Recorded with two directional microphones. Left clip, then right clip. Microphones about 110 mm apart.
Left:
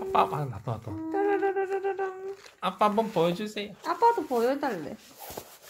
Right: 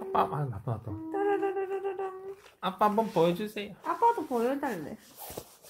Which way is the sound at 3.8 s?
70° left (ahead or behind).